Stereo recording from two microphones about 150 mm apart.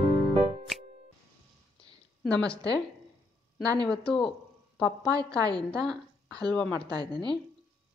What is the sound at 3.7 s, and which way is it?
Speech, 5° left (ahead or behind).